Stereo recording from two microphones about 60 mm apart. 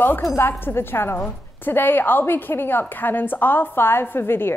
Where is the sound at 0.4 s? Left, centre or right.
Left.